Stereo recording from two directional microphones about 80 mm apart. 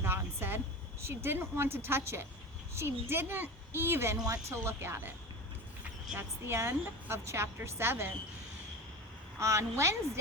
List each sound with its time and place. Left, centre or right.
0.0 s a sound: right
1.0 s a woman's voice: right
6.1 s a woman's voice: right
9.4 s a woman's voice: right